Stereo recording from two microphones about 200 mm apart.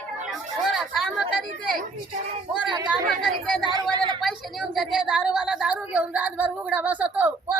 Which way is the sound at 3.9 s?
20° right (ahead or behind).